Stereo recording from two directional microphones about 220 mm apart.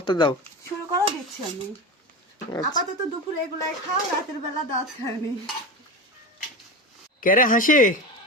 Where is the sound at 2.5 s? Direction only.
15° left (ahead or behind).